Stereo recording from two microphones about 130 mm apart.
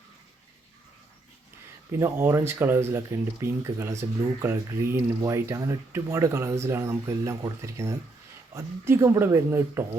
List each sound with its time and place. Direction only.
1.9 s speech: 20° right (ahead or behind)